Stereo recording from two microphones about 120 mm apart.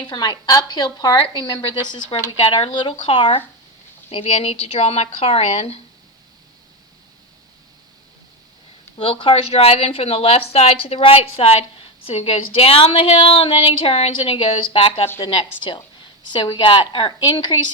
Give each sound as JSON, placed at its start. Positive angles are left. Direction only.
{"t": 0.0, "sound": "a woman's voice", "side_deg": 40}
{"t": 9.0, "sound": "a woman's voice", "side_deg": 50}
{"t": 15.2, "sound": "a woman's voice", "side_deg": 40}